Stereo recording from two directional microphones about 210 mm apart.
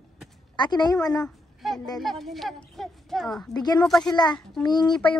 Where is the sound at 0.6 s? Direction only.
20° left (ahead or behind).